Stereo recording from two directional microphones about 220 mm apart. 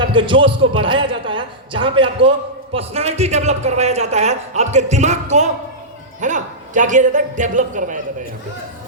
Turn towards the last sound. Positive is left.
turn(degrees=-35)  # may be behind; listen again after turning